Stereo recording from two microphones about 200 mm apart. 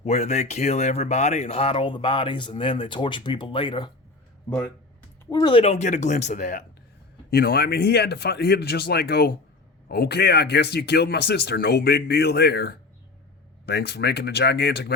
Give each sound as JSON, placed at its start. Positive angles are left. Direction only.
{"t": 0.0, "sound": "speech", "side_deg": 35}
{"t": 4.4, "sound": "speech", "side_deg": 10}
{"t": 7.3, "sound": "speech", "side_deg": 50}